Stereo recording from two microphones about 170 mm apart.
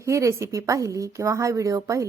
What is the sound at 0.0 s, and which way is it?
Speech, 15° right (ahead or behind).